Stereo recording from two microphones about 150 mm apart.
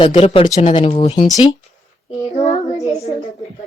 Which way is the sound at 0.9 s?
40° left (ahead or behind).